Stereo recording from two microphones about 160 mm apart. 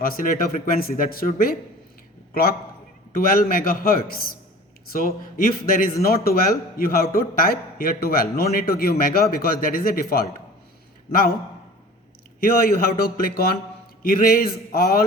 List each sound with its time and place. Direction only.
0.0 s a man's voice: 60° left (ahead or behind)
2.3 s a man's voice: 70° left (ahead or behind)
12.4 s a man's voice: 70° left (ahead or behind)